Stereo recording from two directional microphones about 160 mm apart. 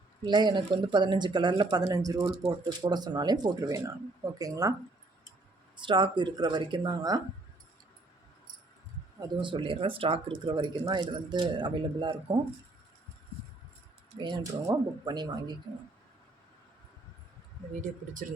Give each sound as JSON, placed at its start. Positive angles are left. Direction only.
{"t": 0.3, "sound": "speech", "side_deg": -30}
{"t": 5.7, "sound": "speech", "side_deg": -30}
{"t": 9.4, "sound": "speech", "side_deg": -30}
{"t": 14.2, "sound": "speech", "side_deg": -30}
{"t": 17.7, "sound": "speech", "side_deg": -55}